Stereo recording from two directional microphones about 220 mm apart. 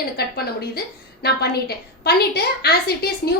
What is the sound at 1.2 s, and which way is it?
A woman's voice, 45° left (ahead or behind).